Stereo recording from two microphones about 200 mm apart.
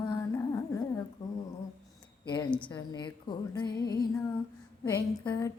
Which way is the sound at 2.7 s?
20° left (ahead or behind).